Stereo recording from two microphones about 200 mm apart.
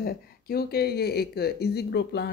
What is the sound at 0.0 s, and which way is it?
Speech, 50° left (ahead or behind).